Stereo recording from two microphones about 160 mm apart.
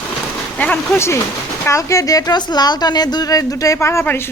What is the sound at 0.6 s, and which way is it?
A woman's voice, 10° left (ahead or behind).